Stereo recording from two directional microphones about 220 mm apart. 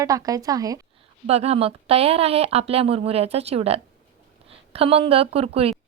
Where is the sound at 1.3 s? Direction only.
30° right (ahead or behind).